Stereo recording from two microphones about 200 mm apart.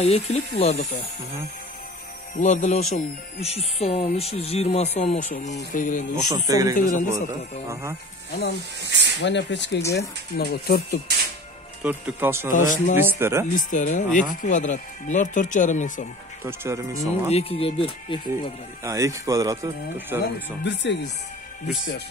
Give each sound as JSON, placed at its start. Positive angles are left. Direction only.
{"t": 0.0, "sound": "speech", "side_deg": 30}
{"t": 2.3, "sound": "speech", "side_deg": 35}
{"t": 6.2, "sound": "speech", "side_deg": -20}
{"t": 6.7, "sound": "speech", "side_deg": 40}
{"t": 8.8, "sound": "speech", "side_deg": -60}
{"t": 9.2, "sound": "speech", "side_deg": 60}
{"t": 11.8, "sound": "speech", "side_deg": -10}
{"t": 12.4, "sound": "speech", "side_deg": 40}
{"t": 12.9, "sound": "speech", "side_deg": -10}
{"t": 13.6, "sound": "speech", "side_deg": 40}
{"t": 16.4, "sound": "speech", "side_deg": -15}
{"t": 17.3, "sound": "speech", "side_deg": 30}
{"t": 18.9, "sound": "speech", "side_deg": -15}
{"t": 20.6, "sound": "speech", "side_deg": 60}